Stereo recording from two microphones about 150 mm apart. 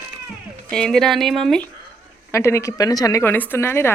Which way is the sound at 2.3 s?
20° left (ahead or behind).